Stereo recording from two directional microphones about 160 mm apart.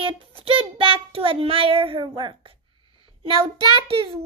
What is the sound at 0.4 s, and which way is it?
Child singing, 35° right (ahead or behind).